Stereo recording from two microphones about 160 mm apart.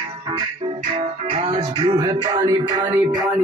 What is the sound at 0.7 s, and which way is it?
Music, 35° right (ahead or behind).